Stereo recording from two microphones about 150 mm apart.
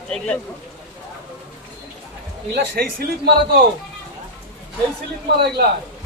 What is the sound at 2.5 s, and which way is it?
Speech, 75° right (ahead or behind).